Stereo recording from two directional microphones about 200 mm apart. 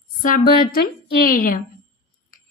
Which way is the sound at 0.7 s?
45° left (ahead or behind).